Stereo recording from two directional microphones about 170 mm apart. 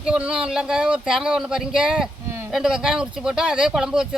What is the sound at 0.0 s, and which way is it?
Speech, 5° right (ahead or behind).